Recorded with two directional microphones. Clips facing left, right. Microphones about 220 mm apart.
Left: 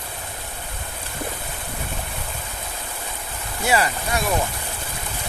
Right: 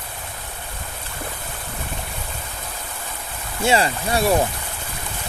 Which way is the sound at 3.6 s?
25° right (ahead or behind).